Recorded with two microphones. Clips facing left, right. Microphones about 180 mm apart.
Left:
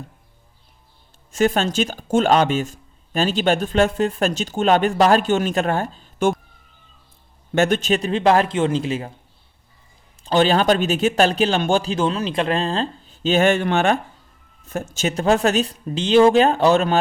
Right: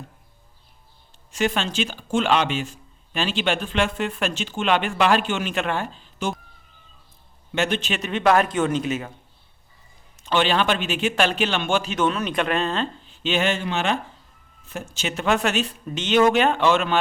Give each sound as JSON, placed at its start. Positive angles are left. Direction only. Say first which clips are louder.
{"t": 1.3, "sound": "speech", "louder": "left 5 dB", "side_deg": 45}
{"t": 7.5, "sound": "speech", "louder": "left 6 dB", "side_deg": 45}
{"t": 10.2, "sound": "speech", "louder": "left 5 dB", "side_deg": 40}